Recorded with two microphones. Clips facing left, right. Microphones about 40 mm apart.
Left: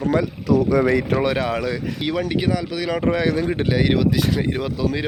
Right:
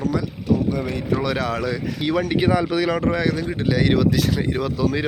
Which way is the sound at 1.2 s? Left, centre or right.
Centre.